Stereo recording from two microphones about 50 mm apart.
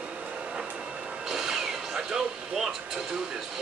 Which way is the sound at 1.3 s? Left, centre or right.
Centre.